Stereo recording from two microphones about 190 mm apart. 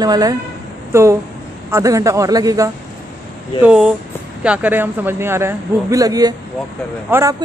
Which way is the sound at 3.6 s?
5° right (ahead or behind).